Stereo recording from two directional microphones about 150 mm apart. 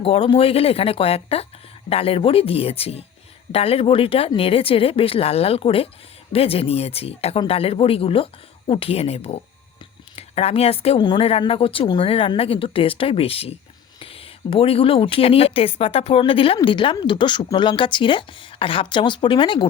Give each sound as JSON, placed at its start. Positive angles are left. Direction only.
{"t": 0.0, "sound": "speech", "side_deg": 40}